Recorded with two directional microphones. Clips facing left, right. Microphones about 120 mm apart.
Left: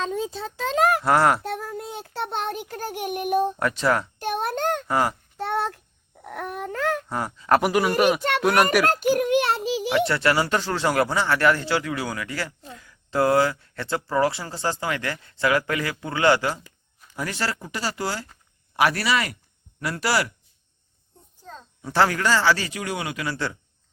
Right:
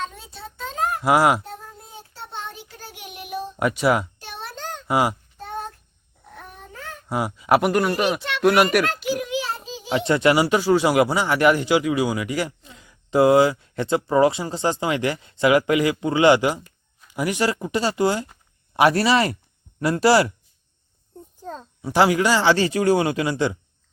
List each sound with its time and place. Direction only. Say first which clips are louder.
0.4 s a sound: left 4 dB; 90° left
1.0 s speech: right 6 dB; 10° right (ahead or behind)
1.5 s child singing: left 9 dB; 80° left; by 3.5 s 50° left (ahead or behind)
3.6 s speech: right 3 dB; 10° right (ahead or behind)
4.2 s a sound: left 10 dB; 55° left (ahead or behind)
4.9 s speech: right 6 dB; 10° right (ahead or behind)
5.4 s child singing: left 8 dB; 75° left (ahead or behind)
6.2 s a sound: left 11 dB; 80° left
7.1 s speech: right 6 dB; 10° right (ahead or behind)
7.6 s speech: even; 5° left (ahead or behind)
8.9 s a sound: left 5 dB; 45° left (ahead or behind); by 9.9 s 80° left
10.1 s speech: right 4 dB; 20° right (ahead or behind)
21.8 s speech: right 3 dB; 15° right (ahead or behind)
22.5 s speech: right 11 dB; 30° right (ahead or behind)